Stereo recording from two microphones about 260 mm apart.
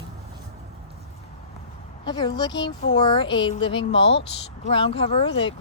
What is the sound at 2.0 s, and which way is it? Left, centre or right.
A woman's voice, centre.